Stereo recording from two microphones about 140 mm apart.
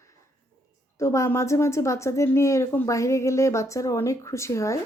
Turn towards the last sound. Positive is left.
turn(degrees=20)  # may be behind; listen again after turning